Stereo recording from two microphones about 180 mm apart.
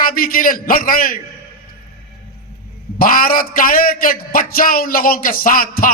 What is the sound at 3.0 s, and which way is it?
A man's voice, 50° left (ahead or behind).